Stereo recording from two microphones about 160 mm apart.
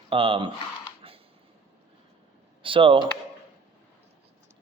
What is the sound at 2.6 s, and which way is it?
Speech, 35° right (ahead or behind).